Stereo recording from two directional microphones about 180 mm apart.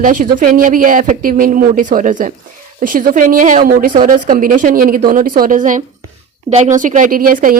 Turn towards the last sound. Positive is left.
turn(degrees=-50)  # may be behind; listen again after turning